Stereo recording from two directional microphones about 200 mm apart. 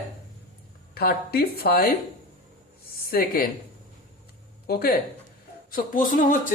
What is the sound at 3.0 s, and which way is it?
Speech, 50° left (ahead or behind).